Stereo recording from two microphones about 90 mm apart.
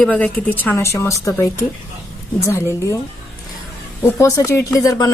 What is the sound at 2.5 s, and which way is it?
Speech, 35° left (ahead or behind).